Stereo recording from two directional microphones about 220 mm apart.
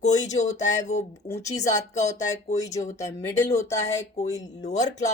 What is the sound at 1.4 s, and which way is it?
Speech, 15° left (ahead or behind).